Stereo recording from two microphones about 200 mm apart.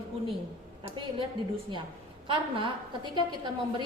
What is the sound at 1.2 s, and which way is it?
A woman's voice, 25° right (ahead or behind).